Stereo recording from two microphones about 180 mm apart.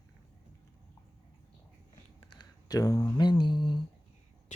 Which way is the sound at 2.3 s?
25° left (ahead or behind).